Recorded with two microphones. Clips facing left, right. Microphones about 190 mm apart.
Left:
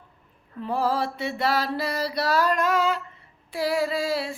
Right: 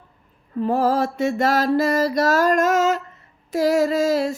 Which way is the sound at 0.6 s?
45° right (ahead or behind).